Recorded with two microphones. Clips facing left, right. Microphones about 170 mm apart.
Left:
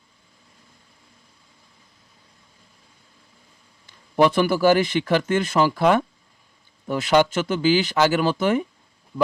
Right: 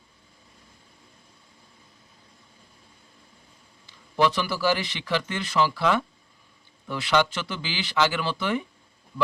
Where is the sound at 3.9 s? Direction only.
50° left (ahead or behind).